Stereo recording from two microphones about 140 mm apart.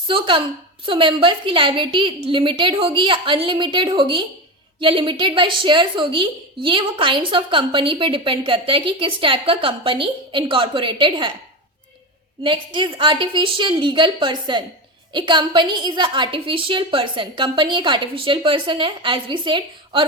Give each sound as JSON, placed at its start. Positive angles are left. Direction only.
{"t": 0.1, "sound": "a woman's voice", "side_deg": -35}
{"t": 12.4, "sound": "a woman's voice", "side_deg": -35}